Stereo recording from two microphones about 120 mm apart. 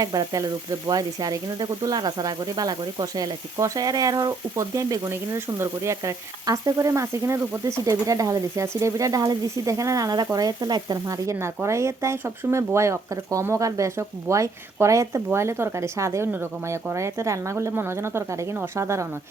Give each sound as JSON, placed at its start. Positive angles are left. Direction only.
{"t": 0.0, "sound": "frying", "side_deg": -35}
{"t": 0.9, "sound": "speech", "side_deg": -30}
{"t": 10.3, "sound": "frying", "side_deg": -35}
{"t": 11.0, "sound": "speech", "side_deg": -25}